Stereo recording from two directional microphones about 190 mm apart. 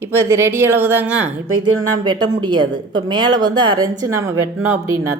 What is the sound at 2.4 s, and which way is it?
Speech, 20° right (ahead or behind).